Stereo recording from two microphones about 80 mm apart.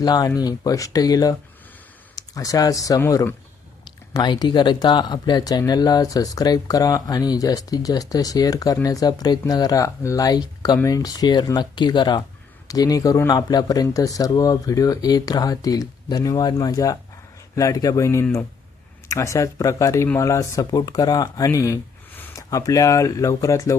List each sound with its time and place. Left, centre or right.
0.0 s speech: left
4.2 s speech: left
12.6 s speech: left
20.7 s speech: left